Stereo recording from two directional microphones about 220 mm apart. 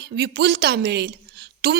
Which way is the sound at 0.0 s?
50° right (ahead or behind).